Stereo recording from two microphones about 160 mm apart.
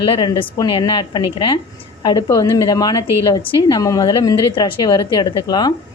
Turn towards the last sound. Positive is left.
turn(degrees=25)  # may be behind; listen again after turning